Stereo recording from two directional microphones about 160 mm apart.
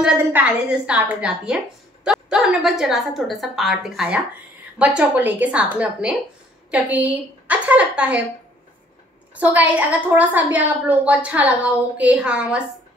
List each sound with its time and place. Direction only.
0.2 s a woman's voice: 10° right (ahead or behind)
9.3 s a woman's voice: 10° right (ahead or behind)